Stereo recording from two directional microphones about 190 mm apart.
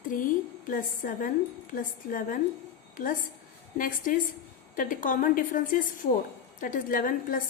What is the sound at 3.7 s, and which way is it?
A woman's voice, 45° left (ahead or behind).